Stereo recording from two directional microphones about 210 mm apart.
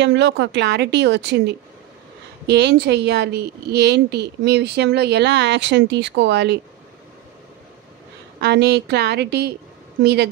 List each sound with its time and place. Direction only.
0.0 s speech: 60° right (ahead or behind)
2.4 s a woman's voice: 55° right (ahead or behind)
8.4 s a woman's voice: 55° right (ahead or behind)